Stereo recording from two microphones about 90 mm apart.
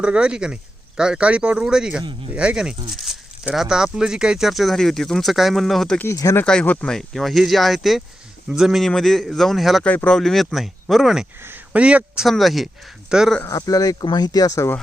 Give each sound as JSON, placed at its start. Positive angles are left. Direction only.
{"t": 0.0, "sound": "speech", "side_deg": -10}
{"t": 6.1, "sound": "speech", "side_deg": 35}
{"t": 6.4, "sound": "speech", "side_deg": 10}
{"t": 9.8, "sound": "speech", "side_deg": 15}
{"t": 10.2, "sound": "speech", "side_deg": 5}
{"t": 11.4, "sound": "a man's voice", "side_deg": -20}
{"t": 12.2, "sound": "speech", "side_deg": 0}
{"t": 13.5, "sound": "speech", "side_deg": 40}